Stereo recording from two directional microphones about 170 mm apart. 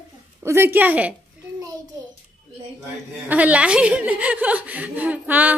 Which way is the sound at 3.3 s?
10° right (ahead or behind).